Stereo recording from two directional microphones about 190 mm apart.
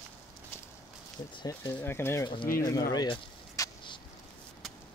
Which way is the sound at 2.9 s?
20° left (ahead or behind).